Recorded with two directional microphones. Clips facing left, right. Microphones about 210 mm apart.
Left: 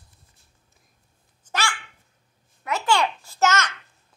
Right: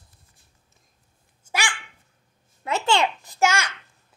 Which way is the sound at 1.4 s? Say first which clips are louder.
Left 1 dB; 15° right (ahead or behind).